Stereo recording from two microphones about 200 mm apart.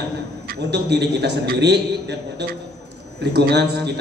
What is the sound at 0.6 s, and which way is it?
A man's voice, 55° right (ahead or behind).